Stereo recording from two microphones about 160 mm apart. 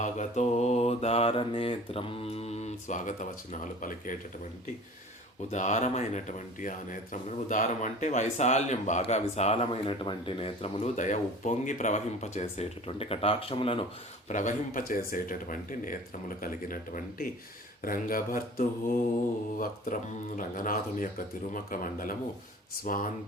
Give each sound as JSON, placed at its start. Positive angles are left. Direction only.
{"t": 0.0, "sound": "mantra", "side_deg": 50}
{"t": 5.5, "sound": "a man's voice", "side_deg": 45}
{"t": 14.3, "sound": "speech", "side_deg": 50}